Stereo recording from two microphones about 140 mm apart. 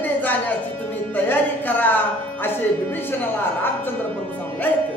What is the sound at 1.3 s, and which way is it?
Speech, 15° left (ahead or behind).